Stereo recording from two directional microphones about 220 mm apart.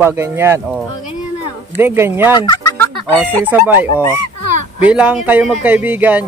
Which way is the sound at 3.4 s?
10° right (ahead or behind).